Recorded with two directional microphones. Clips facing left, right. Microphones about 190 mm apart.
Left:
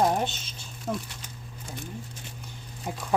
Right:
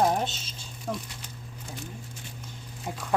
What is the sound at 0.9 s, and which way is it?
Speech, 20° left (ahead or behind).